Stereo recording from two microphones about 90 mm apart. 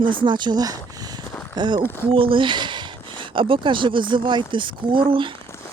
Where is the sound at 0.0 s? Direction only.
65° right (ahead or behind); by 0.8 s 45° right (ahead or behind).